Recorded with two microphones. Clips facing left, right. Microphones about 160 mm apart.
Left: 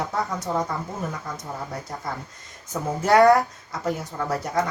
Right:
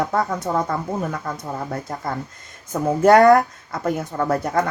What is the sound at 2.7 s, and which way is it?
Speech, 50° right (ahead or behind).